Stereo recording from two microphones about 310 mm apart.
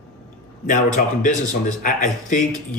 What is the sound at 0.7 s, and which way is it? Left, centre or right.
Speech, left.